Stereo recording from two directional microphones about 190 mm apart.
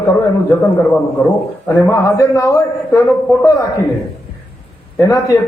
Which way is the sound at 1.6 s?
15° left (ahead or behind).